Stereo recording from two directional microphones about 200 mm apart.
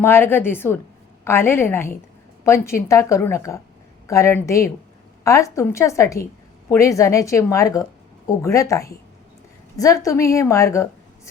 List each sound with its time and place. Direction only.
0.0 s a woman's voice: 10° left (ahead or behind)